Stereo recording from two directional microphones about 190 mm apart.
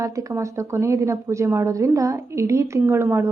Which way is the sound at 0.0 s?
15° right (ahead or behind).